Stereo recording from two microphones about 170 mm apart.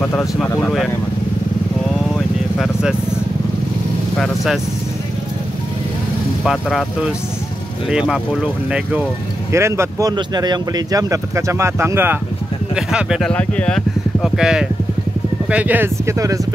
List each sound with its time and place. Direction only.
0.0 s speech: 10° left (ahead or behind)
2.1 s vehicle: 5° right (ahead or behind)
6.4 s speech: centre (ahead or behind)
13.3 s speech: 5° left (ahead or behind); by 16.3 s 20° right (ahead or behind)